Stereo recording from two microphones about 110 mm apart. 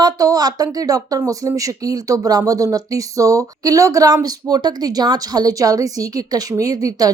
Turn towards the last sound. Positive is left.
turn(degrees=-30)  # may be behind; listen again after turning